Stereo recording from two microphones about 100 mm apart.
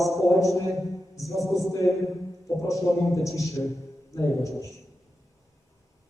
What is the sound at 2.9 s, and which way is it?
A man's voice, 30° left (ahead or behind).